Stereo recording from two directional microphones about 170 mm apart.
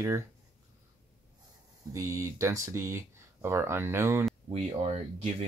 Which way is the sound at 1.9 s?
20° right (ahead or behind).